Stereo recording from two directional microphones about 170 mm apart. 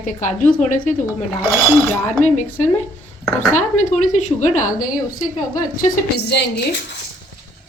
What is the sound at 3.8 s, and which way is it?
A woman's voice, 45° left (ahead or behind).